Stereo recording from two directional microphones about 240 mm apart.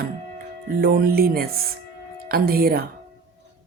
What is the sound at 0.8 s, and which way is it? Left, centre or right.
Speech, right.